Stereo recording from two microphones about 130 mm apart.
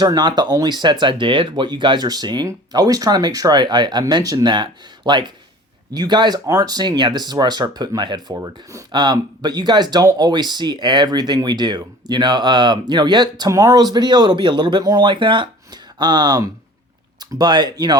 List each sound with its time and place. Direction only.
0.0 s speech: 35° right (ahead or behind)
8.3 s speech: 25° right (ahead or behind)
8.9 s speech: 35° right (ahead or behind)